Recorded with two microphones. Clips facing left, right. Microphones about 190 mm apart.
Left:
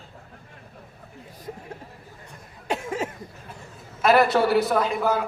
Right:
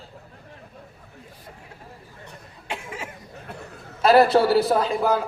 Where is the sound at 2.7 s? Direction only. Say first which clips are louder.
Left 7 dB; 40° left (ahead or behind).